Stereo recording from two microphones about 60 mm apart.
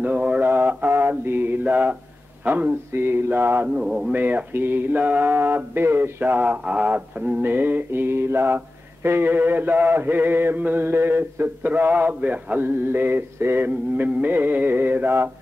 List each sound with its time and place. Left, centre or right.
0.3 s mantra: right
0.8 s mantra: right
2.4 s speech: right
2.9 s mantra: right
3.8 s speech: centre
4.1 s mantra: right
13.7 s mantra: right